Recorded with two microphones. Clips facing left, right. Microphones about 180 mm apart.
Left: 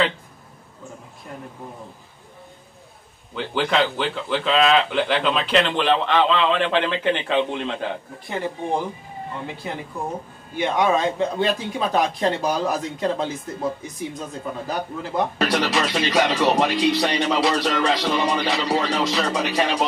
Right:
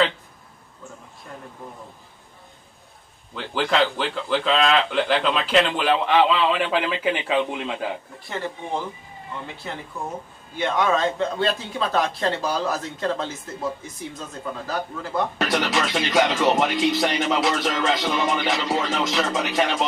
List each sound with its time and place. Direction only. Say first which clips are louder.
3.3 s speech: left 1 dB; centre (ahead or behind)
8.3 s speech: left 4 dB; 15° left (ahead or behind)
15.4 s speech: left 2 dB; centre (ahead or behind)